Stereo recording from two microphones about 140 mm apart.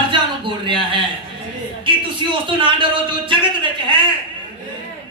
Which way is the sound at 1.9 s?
35° right (ahead or behind).